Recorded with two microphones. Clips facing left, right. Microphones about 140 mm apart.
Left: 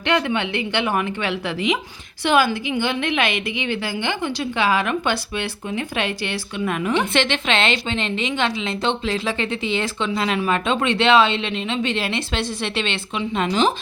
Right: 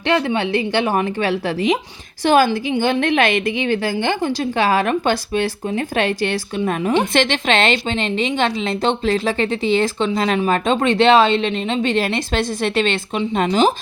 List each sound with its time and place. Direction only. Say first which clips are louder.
0.1 s a woman's voice: right 3 dB; 35° right (ahead or behind)